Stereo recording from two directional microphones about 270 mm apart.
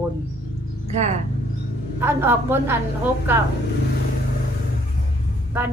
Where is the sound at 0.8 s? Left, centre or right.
Right.